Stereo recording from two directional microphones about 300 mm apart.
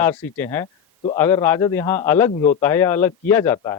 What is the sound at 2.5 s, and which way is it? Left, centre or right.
A man's voice, centre.